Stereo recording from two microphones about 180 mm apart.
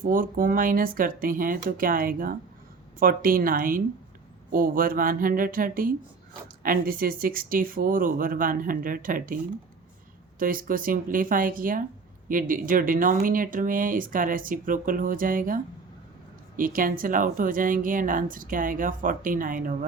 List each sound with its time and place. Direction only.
0.0 s speech: 50° right (ahead or behind)